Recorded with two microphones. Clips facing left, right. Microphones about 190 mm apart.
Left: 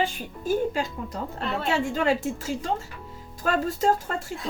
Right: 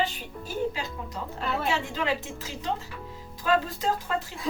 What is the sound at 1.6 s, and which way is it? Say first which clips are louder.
A woman's voice: left 7 dB; 45° left (ahead or behind).